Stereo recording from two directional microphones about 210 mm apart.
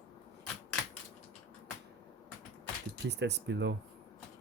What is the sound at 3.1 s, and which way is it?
Speech, 55° right (ahead or behind).